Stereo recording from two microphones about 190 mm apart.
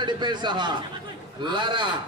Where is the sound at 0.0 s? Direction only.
25° right (ahead or behind).